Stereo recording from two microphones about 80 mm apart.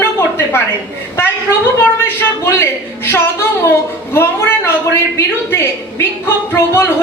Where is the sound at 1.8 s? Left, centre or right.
Left.